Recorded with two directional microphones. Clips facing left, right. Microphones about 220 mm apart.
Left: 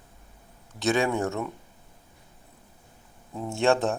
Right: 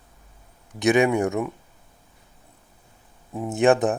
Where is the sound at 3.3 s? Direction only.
15° right (ahead or behind).